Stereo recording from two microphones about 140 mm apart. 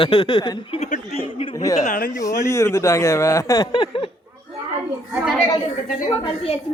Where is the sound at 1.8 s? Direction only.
65° left (ahead or behind).